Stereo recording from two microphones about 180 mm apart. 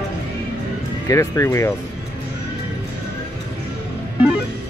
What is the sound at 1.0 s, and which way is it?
Speech, 15° left (ahead or behind).